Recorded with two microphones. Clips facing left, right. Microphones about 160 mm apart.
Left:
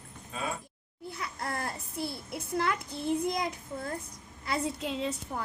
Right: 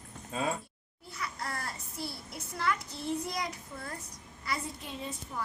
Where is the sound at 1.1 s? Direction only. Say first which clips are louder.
Left 2 dB; 55° left (ahead or behind).